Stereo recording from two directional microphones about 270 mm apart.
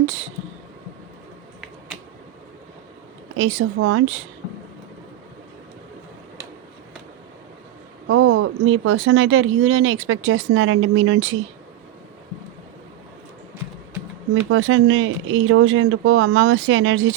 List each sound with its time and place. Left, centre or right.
3.3 s speech: right
8.0 s speech: right
14.5 s speech: right